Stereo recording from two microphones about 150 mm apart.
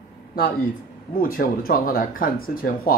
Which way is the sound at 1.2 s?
70° left (ahead or behind).